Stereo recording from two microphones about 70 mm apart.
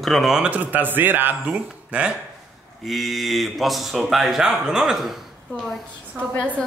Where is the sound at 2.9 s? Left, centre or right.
Centre.